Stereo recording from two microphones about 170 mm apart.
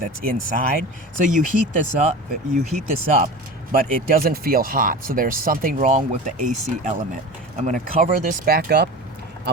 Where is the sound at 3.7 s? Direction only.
55° right (ahead or behind).